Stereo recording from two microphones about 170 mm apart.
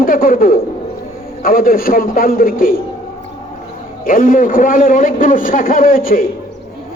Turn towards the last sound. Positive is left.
turn(degrees=55)  # may be behind; listen again after turning